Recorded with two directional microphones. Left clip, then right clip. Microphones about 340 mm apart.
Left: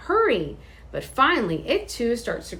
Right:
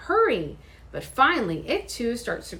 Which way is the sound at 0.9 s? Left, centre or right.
Centre.